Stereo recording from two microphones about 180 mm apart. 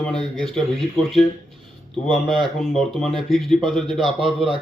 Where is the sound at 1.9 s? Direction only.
Centre (ahead or behind).